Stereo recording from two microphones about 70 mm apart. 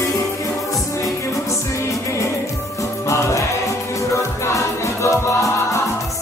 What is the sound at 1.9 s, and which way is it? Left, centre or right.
Music, left.